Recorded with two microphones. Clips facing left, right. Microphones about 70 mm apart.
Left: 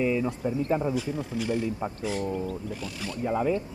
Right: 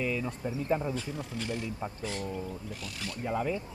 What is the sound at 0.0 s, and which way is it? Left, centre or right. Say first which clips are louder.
Speech: left 7 dB; centre.